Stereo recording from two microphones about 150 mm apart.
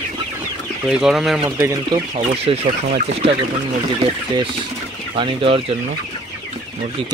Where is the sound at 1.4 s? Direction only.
15° right (ahead or behind).